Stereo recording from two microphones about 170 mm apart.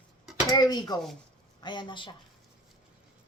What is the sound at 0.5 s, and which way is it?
Speech, 25° left (ahead or behind).